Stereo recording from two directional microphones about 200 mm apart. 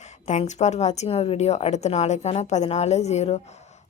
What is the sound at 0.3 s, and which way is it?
A woman's voice, 35° left (ahead or behind).